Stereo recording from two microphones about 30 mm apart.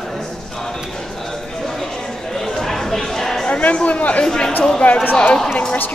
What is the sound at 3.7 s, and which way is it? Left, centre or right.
Chatter, left.